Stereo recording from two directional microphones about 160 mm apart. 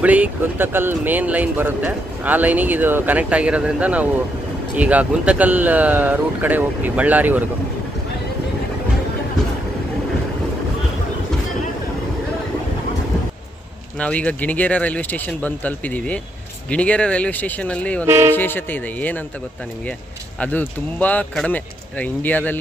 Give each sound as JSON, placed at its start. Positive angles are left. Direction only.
{"t": 0.0, "sound": "speech", "side_deg": -10}
{"t": 13.9, "sound": "speech", "side_deg": 10}
{"t": 18.0, "sound": "speech", "side_deg": -15}
{"t": 18.3, "sound": "speech", "side_deg": 10}
{"t": 20.3, "sound": "speech", "side_deg": 10}